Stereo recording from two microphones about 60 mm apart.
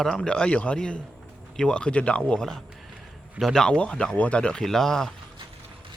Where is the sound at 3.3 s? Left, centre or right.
Centre.